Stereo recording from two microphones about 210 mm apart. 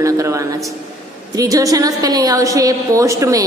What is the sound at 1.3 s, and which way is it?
A woman's voice, 15° right (ahead or behind).